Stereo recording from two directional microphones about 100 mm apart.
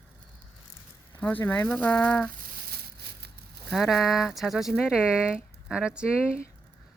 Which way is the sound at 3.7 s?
Centre (ahead or behind).